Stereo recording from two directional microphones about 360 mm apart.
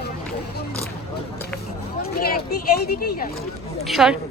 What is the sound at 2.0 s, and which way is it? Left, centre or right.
Speech, left.